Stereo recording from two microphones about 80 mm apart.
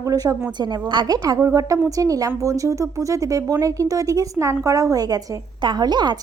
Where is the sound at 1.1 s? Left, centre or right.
Right.